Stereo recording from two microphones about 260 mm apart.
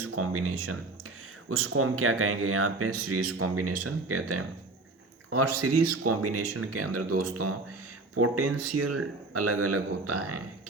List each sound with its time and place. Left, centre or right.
0.0 s speech: right